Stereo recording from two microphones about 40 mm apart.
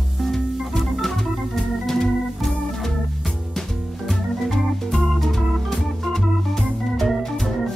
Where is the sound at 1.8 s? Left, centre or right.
Centre.